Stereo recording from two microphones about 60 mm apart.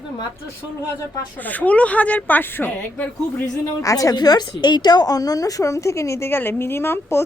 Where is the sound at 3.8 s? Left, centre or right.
Left.